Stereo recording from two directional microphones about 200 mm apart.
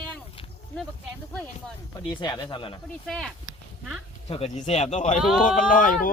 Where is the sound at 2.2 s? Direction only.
20° left (ahead or behind).